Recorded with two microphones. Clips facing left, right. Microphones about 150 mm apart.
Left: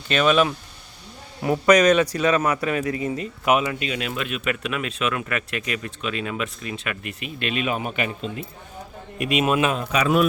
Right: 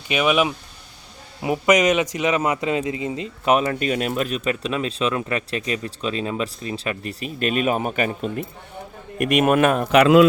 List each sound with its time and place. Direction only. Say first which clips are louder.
0.1 s a man's voice: left 1 dB; 15° right (ahead or behind)
3.4 s a man's voice: right 2 dB; 35° right (ahead or behind); by 10.2 s 80° right